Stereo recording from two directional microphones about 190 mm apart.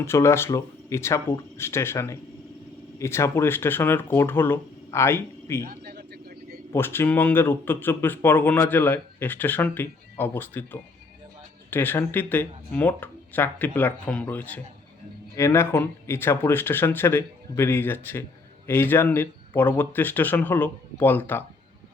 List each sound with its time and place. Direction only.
0.0 s speech: 15° left (ahead or behind)
5.6 s vehicle: 55° right (ahead or behind)
6.7 s speech: 10° left (ahead or behind)